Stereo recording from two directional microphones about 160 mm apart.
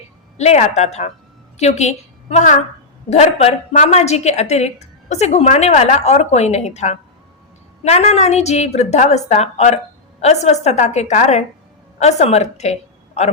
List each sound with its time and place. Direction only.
0.3 s a woman's voice: 45° left (ahead or behind)